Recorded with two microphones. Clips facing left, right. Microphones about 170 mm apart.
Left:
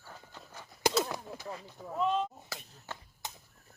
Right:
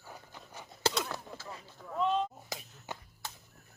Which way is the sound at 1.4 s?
30° left (ahead or behind).